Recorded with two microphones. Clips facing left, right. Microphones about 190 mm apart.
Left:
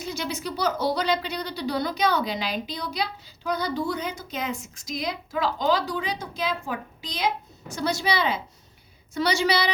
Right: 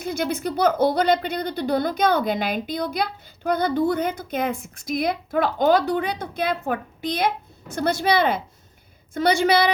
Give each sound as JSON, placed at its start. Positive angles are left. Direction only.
{"t": 0.0, "sound": "a woman's voice", "side_deg": -55}